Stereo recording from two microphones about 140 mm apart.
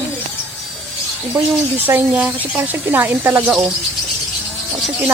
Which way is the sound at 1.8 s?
10° right (ahead or behind).